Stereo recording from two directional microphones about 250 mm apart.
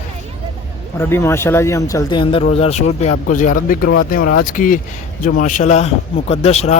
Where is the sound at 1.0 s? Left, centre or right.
Centre.